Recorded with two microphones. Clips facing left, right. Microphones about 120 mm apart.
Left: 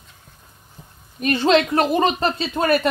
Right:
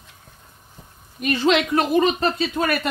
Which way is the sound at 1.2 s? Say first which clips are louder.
Left 2 dB; 35° left (ahead or behind).